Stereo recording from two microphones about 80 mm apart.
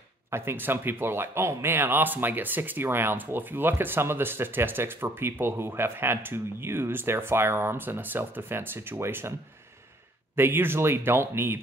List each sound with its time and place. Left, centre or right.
0.3 s speech: right
10.3 s speech: right